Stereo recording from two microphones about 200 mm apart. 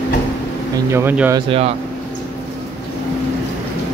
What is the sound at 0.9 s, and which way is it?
Speech, 10° right (ahead or behind).